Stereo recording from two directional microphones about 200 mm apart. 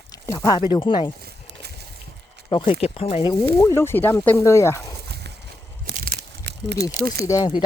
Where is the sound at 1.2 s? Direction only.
50° right (ahead or behind).